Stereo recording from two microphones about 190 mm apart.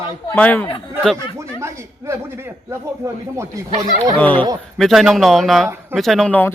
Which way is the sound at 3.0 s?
15° right (ahead or behind).